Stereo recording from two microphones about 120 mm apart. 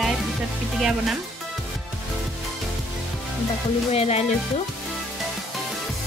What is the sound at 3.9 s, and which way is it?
Speech, 65° left (ahead or behind).